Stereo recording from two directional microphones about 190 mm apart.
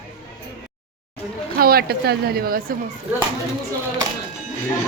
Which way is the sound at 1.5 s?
55° right (ahead or behind).